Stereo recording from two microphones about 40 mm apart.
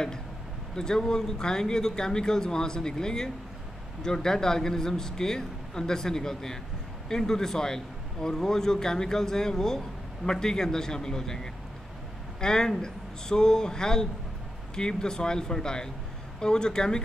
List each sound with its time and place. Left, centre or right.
0.7 s speech: centre